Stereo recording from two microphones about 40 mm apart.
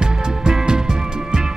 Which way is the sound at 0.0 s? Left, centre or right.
Centre.